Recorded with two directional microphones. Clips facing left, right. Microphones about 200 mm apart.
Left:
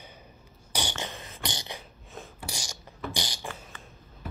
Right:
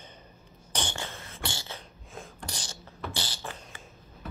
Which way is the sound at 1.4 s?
15° left (ahead or behind).